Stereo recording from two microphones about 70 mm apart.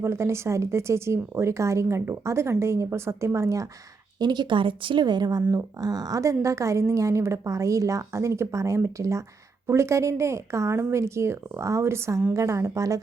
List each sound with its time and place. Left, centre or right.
0.0 s speech: right
4.2 s speech: right
5.5 s a woman's voice: right